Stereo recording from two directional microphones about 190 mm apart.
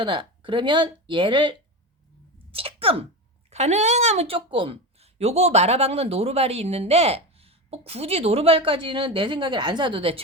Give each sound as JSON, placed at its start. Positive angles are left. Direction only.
{"t": 0.0, "sound": "speech", "side_deg": -25}
{"t": 2.5, "sound": "a sound", "side_deg": -30}
{"t": 3.5, "sound": "speech", "side_deg": -35}